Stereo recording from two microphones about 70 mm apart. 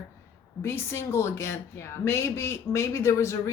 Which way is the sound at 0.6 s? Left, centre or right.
Left.